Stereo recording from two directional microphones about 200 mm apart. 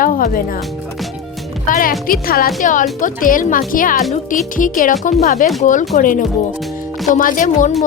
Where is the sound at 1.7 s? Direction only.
45° left (ahead or behind).